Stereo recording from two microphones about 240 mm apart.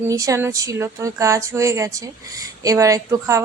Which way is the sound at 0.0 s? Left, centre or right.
Centre.